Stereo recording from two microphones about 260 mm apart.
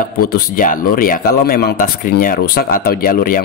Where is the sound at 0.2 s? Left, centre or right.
Left.